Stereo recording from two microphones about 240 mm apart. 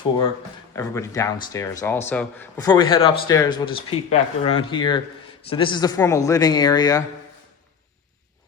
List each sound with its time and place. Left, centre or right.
0.8 s speech: centre